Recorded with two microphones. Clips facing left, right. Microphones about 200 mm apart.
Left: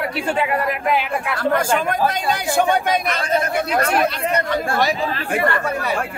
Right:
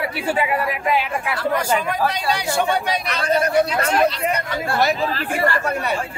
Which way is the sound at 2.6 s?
50° left (ahead or behind).